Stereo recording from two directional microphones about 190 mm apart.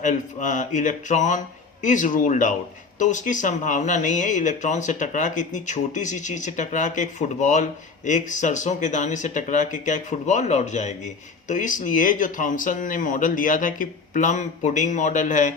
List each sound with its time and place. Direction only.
0.0 s speech: 40° left (ahead or behind)